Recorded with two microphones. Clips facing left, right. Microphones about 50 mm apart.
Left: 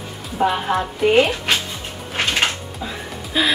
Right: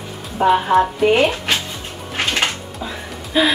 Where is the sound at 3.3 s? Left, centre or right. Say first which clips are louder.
Right 3 dB; centre.